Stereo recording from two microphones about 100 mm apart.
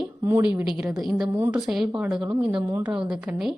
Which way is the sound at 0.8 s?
5° right (ahead or behind).